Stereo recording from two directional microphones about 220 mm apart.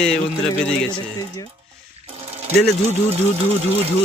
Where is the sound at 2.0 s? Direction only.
25° right (ahead or behind).